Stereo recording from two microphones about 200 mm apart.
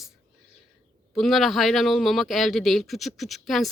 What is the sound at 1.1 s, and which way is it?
A man's voice, centre (ahead or behind).